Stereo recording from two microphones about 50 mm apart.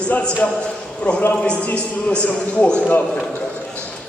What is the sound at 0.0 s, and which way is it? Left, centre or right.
A man's voice, left.